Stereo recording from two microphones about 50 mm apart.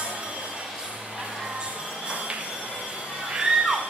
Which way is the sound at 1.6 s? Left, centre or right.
Right.